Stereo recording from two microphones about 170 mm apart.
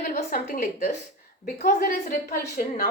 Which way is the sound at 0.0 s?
60° left (ahead or behind).